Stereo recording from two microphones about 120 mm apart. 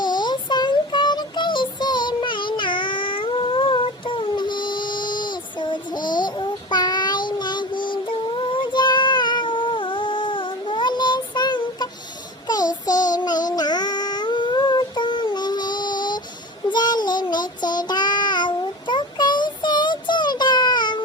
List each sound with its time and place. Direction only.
0.0 s child singing: 40° left (ahead or behind)
13.6 s a sound: 35° left (ahead or behind)
16.7 s child singing: 35° left (ahead or behind)